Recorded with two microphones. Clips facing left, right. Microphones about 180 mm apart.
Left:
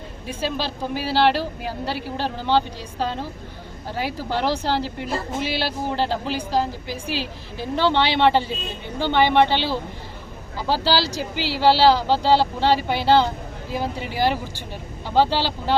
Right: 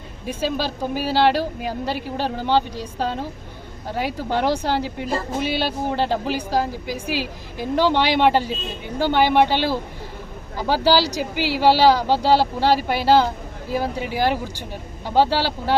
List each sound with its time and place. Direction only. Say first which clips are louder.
0.3 s a woman's voice: right 2 dB; 15° right (ahead or behind)